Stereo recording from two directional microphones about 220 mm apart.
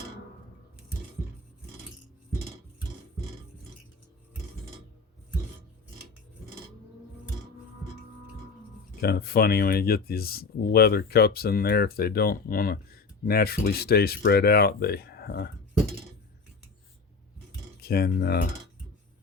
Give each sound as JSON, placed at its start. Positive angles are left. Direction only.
{"t": 9.0, "sound": "speech", "side_deg": 45}
{"t": 17.7, "sound": "speech", "side_deg": 45}